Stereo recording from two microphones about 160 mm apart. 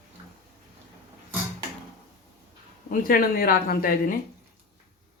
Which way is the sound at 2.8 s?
60° left (ahead or behind).